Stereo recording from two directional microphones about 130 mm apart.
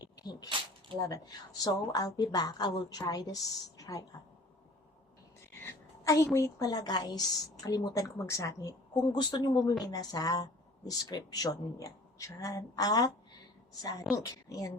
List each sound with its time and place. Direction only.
0.2 s a woman's voice: 30° left (ahead or behind)
5.6 s a woman's voice: 20° left (ahead or behind)
14.2 s a woman's voice: 25° left (ahead or behind)